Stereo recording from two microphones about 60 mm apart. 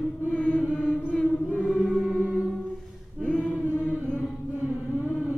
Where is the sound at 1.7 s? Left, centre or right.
Centre.